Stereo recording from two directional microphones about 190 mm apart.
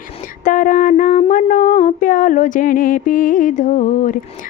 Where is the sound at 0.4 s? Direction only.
45° left (ahead or behind).